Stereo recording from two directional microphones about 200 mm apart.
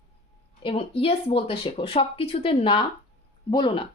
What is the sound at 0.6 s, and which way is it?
Speech, 30° left (ahead or behind).